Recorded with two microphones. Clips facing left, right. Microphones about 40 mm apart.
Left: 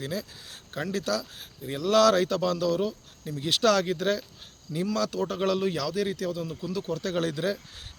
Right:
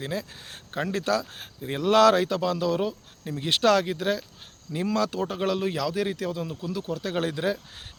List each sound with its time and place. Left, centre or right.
0.0 s speech: right
2.2 s speech: centre
3.8 s speech: centre
4.7 s speech: right
5.9 s speech: right